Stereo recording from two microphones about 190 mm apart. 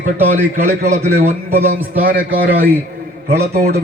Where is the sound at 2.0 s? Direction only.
50° right (ahead or behind).